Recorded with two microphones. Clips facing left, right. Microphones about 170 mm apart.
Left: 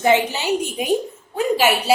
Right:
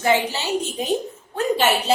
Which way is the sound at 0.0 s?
20° left (ahead or behind).